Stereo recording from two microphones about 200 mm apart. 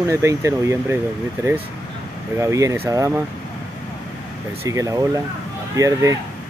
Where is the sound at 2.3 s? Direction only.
15° right (ahead or behind).